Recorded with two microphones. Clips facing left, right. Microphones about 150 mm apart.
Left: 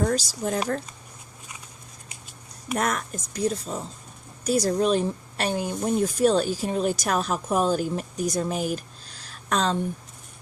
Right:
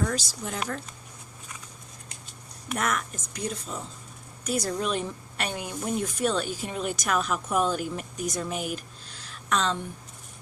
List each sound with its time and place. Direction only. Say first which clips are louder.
0.0 s speech: left 5 dB; 35° left (ahead or behind)
2.7 s a woman's voice: left 3 dB; 40° left (ahead or behind)